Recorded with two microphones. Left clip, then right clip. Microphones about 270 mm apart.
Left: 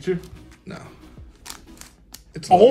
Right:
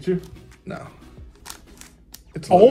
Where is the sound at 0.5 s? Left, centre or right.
Centre.